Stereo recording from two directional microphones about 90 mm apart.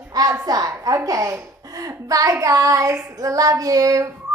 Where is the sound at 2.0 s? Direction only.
40° right (ahead or behind).